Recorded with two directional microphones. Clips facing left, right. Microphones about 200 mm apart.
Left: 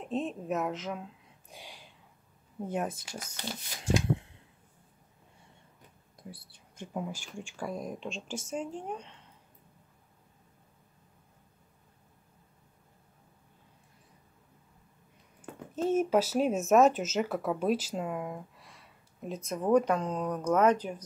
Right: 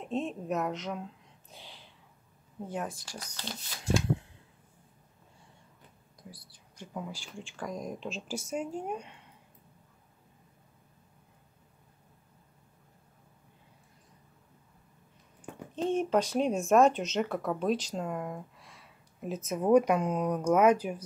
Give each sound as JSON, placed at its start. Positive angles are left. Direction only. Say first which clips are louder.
{"t": 0.0, "sound": "speech", "louder": "even", "side_deg": 0}
{"t": 1.5, "sound": "a sound", "louder": "left 2 dB", "side_deg": 15}
{"t": 2.7, "sound": "speech", "louder": "left 3 dB", "side_deg": 20}
{"t": 6.1, "sound": "a sound", "louder": "left 4 dB", "side_deg": 25}
{"t": 7.3, "sound": "speech", "louder": "left 1 dB", "side_deg": 10}
{"t": 15.7, "sound": "speech", "louder": "left 1 dB", "side_deg": 5}